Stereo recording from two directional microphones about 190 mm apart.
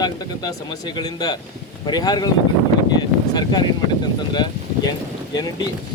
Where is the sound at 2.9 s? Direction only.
20° left (ahead or behind).